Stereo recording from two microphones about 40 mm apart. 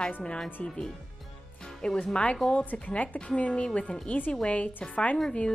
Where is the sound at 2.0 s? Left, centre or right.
Left.